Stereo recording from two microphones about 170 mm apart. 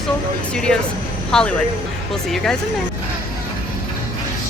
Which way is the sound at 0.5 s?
5° left (ahead or behind).